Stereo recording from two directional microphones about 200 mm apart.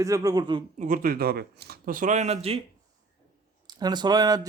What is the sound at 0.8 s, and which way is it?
Speech, 45° right (ahead or behind).